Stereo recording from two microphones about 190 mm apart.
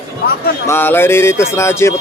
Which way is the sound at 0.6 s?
10° left (ahead or behind).